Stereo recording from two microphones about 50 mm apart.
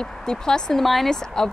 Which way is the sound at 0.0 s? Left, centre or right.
Centre.